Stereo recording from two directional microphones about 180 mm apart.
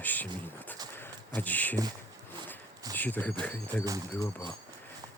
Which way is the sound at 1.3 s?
10° left (ahead or behind).